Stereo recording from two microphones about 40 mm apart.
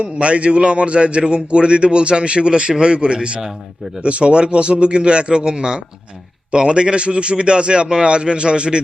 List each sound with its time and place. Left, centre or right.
0.0 s a man's voice: right